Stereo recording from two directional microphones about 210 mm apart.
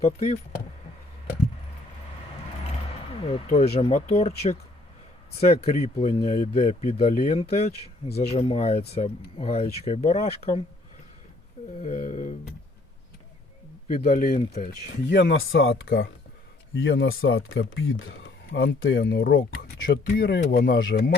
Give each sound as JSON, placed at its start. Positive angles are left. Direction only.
{"t": 0.0, "sound": "speech", "side_deg": 30}
{"t": 3.1, "sound": "speech", "side_deg": 30}
{"t": 5.6, "sound": "speech", "side_deg": 30}
{"t": 11.8, "sound": "speech", "side_deg": 35}
{"t": 13.8, "sound": "speech", "side_deg": 30}
{"t": 15.0, "sound": "speech", "side_deg": 55}